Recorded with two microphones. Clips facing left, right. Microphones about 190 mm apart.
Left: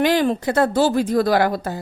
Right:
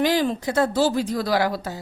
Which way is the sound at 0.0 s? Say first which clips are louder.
Left 3 dB; 60° left (ahead or behind).